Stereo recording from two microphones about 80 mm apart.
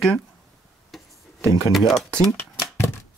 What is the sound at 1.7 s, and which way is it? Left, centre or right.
Speech, centre.